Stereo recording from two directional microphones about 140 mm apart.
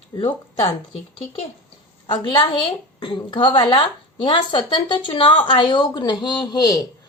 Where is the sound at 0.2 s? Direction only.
40° left (ahead or behind).